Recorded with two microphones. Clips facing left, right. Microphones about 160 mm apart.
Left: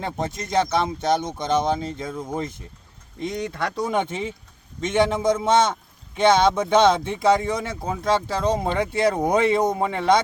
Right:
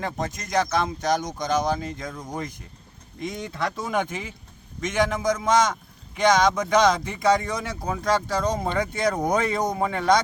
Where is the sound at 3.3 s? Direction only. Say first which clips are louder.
Left 2 dB; centre (ahead or behind).